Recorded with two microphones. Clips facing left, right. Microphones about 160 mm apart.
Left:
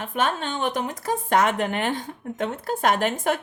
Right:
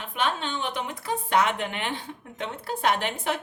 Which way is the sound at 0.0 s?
45° left (ahead or behind).